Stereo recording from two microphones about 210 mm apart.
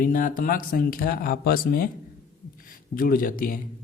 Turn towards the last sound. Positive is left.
turn(degrees=40)  # may be behind; listen again after turning